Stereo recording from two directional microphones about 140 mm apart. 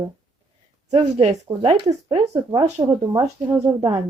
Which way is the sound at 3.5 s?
25° right (ahead or behind).